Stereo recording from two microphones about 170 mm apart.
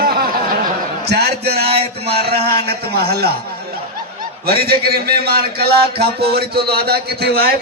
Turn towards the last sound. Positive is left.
turn(degrees=-70)  # may be behind; listen again after turning